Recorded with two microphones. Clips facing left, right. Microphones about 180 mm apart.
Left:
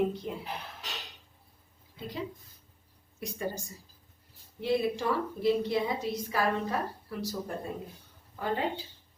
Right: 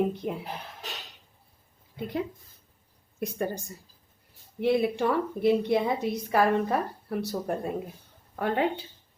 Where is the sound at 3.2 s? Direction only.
55° right (ahead or behind).